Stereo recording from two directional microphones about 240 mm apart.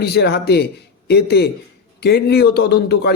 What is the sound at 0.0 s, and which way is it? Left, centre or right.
Speech, left.